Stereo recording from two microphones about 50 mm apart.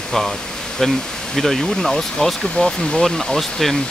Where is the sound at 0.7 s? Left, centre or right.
Centre.